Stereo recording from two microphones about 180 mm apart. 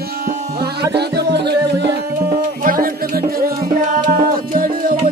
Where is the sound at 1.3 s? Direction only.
70° right (ahead or behind).